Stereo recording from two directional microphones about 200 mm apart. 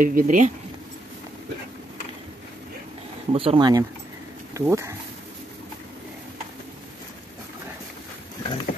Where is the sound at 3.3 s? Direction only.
25° right (ahead or behind).